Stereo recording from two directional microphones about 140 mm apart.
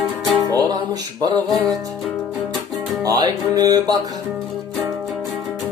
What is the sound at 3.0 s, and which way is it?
Music, 25° right (ahead or behind).